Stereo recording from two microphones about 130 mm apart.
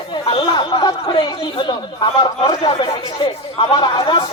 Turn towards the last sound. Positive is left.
turn(degrees=35)  # may be behind; listen again after turning